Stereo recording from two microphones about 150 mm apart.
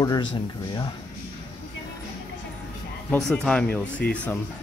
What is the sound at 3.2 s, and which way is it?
Speech, 5° left (ahead or behind).